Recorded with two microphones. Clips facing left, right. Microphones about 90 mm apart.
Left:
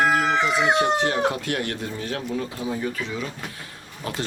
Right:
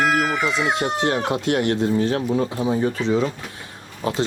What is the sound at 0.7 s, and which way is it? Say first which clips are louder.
Speech: even; 25° right (ahead or behind).